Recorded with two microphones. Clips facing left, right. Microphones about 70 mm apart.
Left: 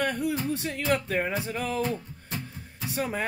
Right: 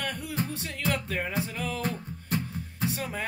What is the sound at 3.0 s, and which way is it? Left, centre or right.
Music, left.